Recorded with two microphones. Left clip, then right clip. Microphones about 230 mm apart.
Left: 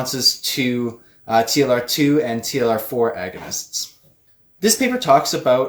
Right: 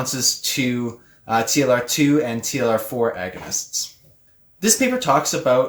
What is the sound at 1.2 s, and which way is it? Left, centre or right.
Speech, centre.